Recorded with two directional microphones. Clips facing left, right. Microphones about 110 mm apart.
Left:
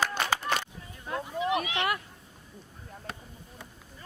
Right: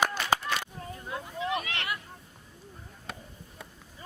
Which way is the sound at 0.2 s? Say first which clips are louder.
Even; 55° left (ahead or behind).